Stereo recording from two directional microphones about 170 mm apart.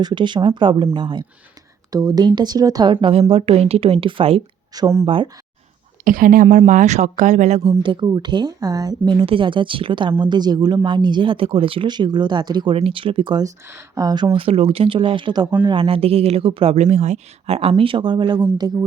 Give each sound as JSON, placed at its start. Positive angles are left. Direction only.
{"t": 0.0, "sound": "speech", "side_deg": -25}
{"t": 4.7, "sound": "speech", "side_deg": -20}
{"t": 5.0, "sound": "speech", "side_deg": -30}
{"t": 6.1, "sound": "speech", "side_deg": -55}
{"t": 7.7, "sound": "speech", "side_deg": -25}